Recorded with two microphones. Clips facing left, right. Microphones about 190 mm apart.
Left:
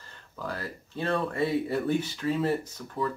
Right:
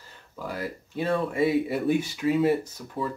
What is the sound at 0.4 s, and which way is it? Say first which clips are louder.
Speech: right 3 dB; 10° right (ahead or behind).